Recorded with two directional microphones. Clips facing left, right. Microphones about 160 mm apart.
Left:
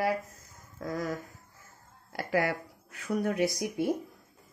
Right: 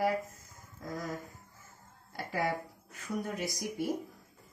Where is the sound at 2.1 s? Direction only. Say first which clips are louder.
Left 4 dB; 80° left.